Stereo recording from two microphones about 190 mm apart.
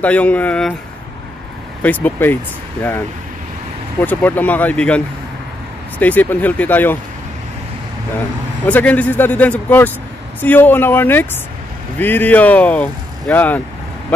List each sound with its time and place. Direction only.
0.0 s speech: 5° left (ahead or behind)
1.8 s speech: 10° left (ahead or behind)
4.0 s speech: 10° left (ahead or behind)
8.6 s speech: 10° left (ahead or behind)